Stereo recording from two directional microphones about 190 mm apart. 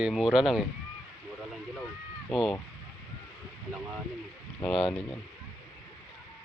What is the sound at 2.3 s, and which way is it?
Speech, centre (ahead or behind).